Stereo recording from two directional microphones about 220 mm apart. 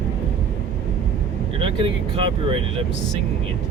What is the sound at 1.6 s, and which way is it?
Speech, 25° right (ahead or behind).